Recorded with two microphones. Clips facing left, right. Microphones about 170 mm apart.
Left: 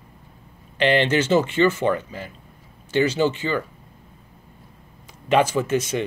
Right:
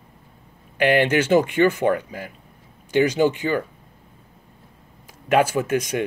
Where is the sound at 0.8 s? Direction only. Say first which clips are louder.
Right 1 dB; 10° right (ahead or behind).